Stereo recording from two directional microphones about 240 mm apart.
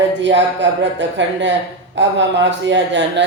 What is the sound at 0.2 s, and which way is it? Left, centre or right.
A man's voice, right.